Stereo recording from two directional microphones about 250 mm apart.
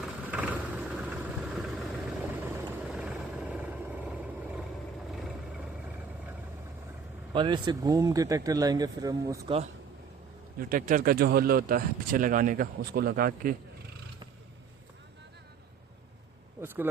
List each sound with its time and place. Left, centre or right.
0.0 s vehicle: centre
7.3 s speech: centre
10.6 s speech: right
16.6 s a sound: centre